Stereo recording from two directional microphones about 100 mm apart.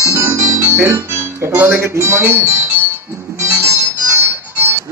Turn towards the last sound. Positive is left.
turn(degrees=-30)  # may be behind; listen again after turning